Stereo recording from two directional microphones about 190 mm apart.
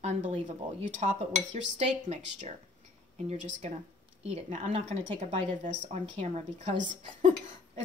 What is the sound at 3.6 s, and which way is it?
Speech, 35° right (ahead or behind).